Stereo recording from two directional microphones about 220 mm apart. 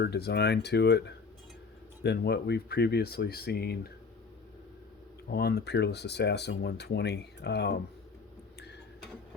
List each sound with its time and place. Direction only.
0.0 s speech: 50° left (ahead or behind)
5.3 s speech: 45° left (ahead or behind)